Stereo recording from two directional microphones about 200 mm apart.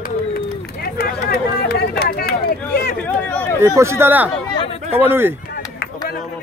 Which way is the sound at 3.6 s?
15° right (ahead or behind).